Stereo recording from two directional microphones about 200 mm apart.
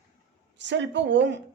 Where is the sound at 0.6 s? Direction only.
60° right (ahead or behind).